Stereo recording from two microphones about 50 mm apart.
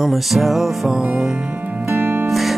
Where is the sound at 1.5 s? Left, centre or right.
Right.